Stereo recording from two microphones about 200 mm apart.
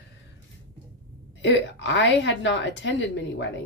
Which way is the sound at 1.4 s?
60° left (ahead or behind).